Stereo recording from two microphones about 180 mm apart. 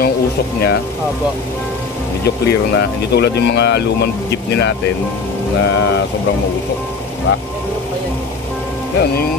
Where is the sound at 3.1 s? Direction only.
65° left (ahead or behind).